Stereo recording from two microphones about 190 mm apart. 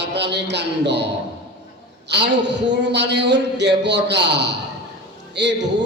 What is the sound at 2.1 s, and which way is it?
A man's voice, 65° right (ahead or behind).